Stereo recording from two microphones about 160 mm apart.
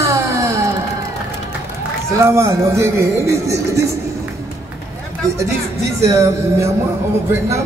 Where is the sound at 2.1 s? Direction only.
15° right (ahead or behind).